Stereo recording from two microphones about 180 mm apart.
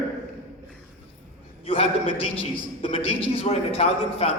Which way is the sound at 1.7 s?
35° left (ahead or behind).